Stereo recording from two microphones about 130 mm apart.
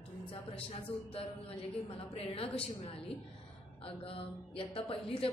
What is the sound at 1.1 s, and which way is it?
A woman's voice, 50° left (ahead or behind).